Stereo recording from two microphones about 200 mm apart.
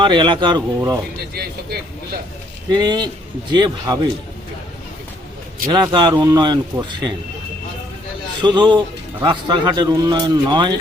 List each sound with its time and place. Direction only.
0.0 s a man's voice: 25° right (ahead or behind)
2.6 s a man's voice: 20° right (ahead or behind)
5.6 s a man's voice: 20° right (ahead or behind)
8.4 s a man's voice: 20° right (ahead or behind)